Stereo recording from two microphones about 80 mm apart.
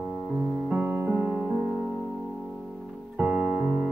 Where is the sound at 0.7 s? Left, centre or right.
Right.